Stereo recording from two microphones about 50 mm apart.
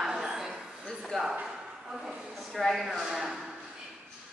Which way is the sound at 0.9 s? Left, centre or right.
Centre.